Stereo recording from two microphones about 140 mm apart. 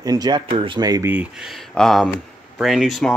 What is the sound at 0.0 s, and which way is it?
Speech, 25° right (ahead or behind).